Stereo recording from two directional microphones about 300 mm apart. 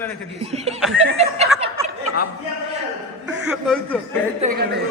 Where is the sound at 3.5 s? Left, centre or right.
Centre.